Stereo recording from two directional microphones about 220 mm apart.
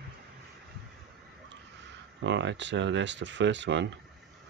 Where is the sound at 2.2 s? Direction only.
55° right (ahead or behind).